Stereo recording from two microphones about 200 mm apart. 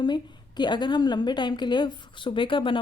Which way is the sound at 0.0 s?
20° left (ahead or behind).